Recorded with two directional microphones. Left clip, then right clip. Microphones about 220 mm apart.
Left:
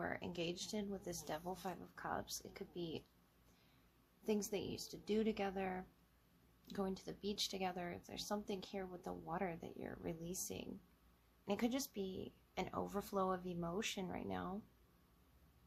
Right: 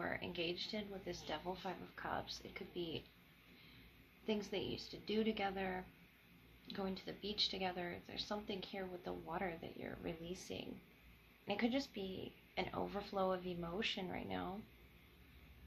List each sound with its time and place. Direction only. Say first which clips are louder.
0.0 s speech: right 2 dB; 45° left (ahead or behind)
4.3 s speech: even; 50° left (ahead or behind)